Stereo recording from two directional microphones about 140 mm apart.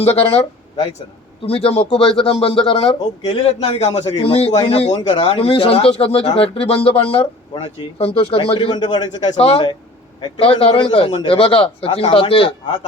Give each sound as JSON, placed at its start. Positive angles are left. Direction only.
{"t": 0.0, "sound": "speech", "side_deg": 45}
{"t": 4.9, "sound": "speech", "side_deg": 35}
{"t": 9.4, "sound": "a man's voice", "side_deg": 40}